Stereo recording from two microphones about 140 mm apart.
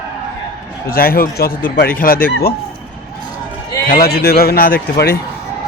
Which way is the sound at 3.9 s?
90° left.